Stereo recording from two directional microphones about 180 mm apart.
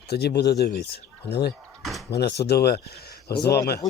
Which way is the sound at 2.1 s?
65° left (ahead or behind).